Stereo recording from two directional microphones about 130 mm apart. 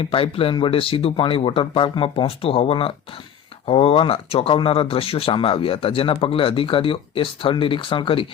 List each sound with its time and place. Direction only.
0.0 s speech: 45° left (ahead or behind)